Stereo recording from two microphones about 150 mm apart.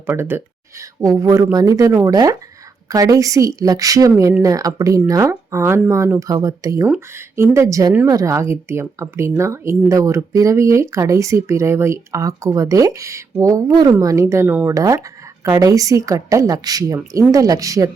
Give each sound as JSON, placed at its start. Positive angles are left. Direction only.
{"t": 0.0, "sound": "speech", "side_deg": -15}